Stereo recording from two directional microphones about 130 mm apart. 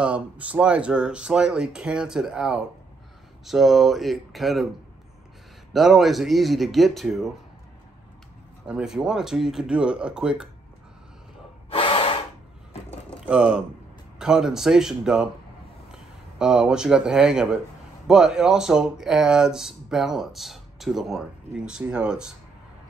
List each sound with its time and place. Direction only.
0.0 s speech: 10° right (ahead or behind)
5.7 s speech: centre (ahead or behind)
8.6 s speech: 5° right (ahead or behind)
11.7 s gasp: 45° left (ahead or behind)
13.2 s speech: 10° right (ahead or behind)